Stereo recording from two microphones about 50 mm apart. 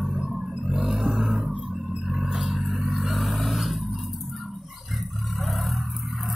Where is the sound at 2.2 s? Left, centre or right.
Right.